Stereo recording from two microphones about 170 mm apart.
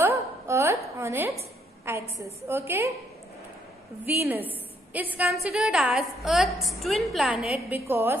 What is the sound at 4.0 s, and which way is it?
A woman's voice, 10° right (ahead or behind).